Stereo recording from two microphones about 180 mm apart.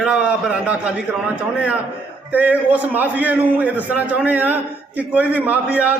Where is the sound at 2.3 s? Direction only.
10° right (ahead or behind).